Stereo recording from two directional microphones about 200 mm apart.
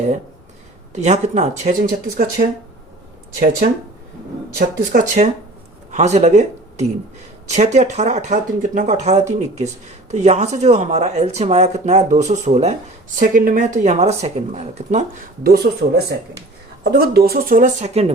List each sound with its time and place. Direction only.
0.9 s speech: 35° right (ahead or behind)
4.5 s speech: 40° right (ahead or behind)
15.4 s speech: 50° right (ahead or behind); by 18.1 s 30° right (ahead or behind)